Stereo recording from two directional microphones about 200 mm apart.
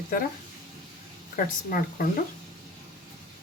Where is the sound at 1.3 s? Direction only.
45° left (ahead or behind).